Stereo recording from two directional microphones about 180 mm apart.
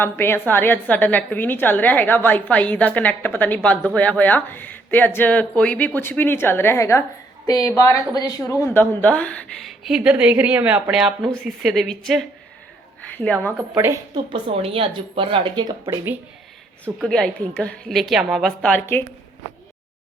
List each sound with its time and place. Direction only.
0.0 s a woman's voice: 10° left (ahead or behind)
13.7 s a woman's voice: 20° right (ahead or behind)
14.3 s speech: 30° right (ahead or behind)
16.8 s a woman's voice: 5° left (ahead or behind)